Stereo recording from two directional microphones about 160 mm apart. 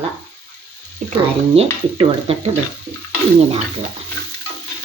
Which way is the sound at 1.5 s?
40° right (ahead or behind).